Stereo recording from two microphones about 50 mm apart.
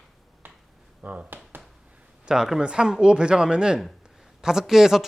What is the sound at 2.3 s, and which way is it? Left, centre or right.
Speech, centre.